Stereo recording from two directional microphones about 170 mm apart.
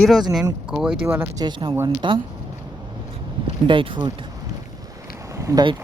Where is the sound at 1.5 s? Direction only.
25° right (ahead or behind).